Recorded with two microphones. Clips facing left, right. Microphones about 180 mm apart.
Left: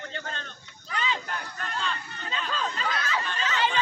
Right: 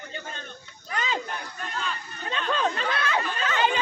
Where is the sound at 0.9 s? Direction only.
45° right (ahead or behind).